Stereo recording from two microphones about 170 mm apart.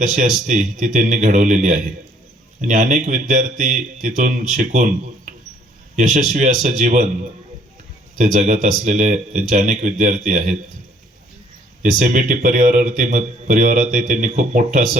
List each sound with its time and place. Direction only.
0.0 s a man's voice: 45° right (ahead or behind)
8.2 s a man's voice: 45° right (ahead or behind)
11.8 s a man's voice: 45° right (ahead or behind)